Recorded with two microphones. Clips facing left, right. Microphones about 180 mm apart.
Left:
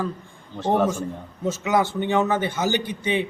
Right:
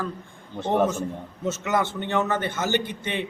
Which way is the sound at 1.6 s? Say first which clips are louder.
Left 4 dB; centre (ahead or behind).